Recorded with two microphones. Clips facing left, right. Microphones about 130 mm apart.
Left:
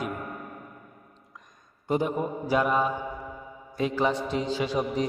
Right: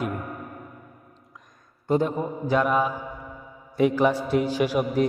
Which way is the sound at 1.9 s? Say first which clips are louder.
Right 3 dB; 10° left (ahead or behind).